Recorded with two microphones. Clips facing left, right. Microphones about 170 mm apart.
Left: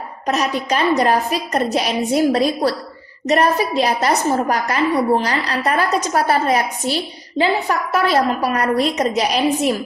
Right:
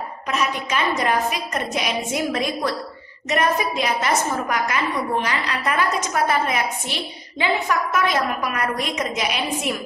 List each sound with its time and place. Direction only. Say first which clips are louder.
0.3 s a woman's voice: left 5 dB; 35° left (ahead or behind)